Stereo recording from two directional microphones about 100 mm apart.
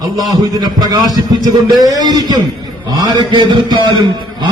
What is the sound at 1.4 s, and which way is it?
Music, 40° right (ahead or behind).